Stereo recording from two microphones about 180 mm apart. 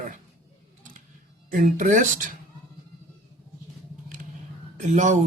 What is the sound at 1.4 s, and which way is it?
Speech, 50° right (ahead or behind).